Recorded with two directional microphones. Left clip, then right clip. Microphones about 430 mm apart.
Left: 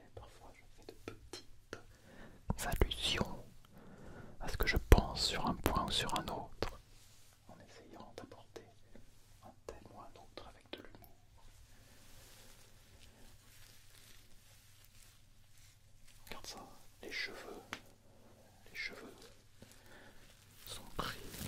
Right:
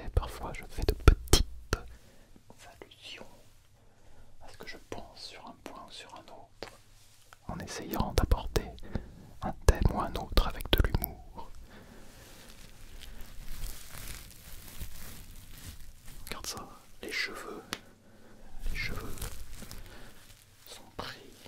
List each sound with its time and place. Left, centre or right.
0.0 s whispering: right
1.7 s whispering: right
2.4 s whispering: left
4.4 s whispering: left
7.5 s whispering: right
16.3 s whispering: centre
18.7 s a sound: centre
20.6 s whispering: centre